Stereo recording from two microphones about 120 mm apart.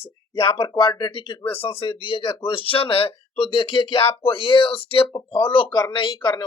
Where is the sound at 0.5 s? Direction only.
40° left (ahead or behind).